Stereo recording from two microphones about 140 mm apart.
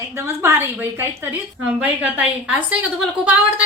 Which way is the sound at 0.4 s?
15° right (ahead or behind).